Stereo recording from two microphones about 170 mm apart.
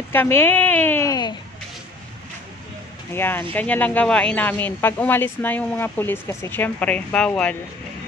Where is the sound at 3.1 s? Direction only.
10° left (ahead or behind).